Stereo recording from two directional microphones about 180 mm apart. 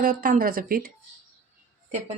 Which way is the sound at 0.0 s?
50° right (ahead or behind).